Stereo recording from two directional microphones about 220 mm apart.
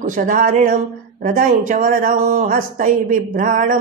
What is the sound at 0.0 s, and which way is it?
A woman's voice, 35° right (ahead or behind).